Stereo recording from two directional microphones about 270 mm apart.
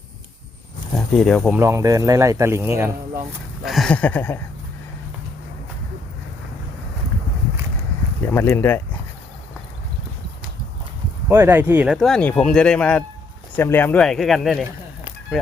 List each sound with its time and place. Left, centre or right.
0.9 s speech: centre
3.6 s a sound: centre
8.2 s speech: centre
11.3 s speech: centre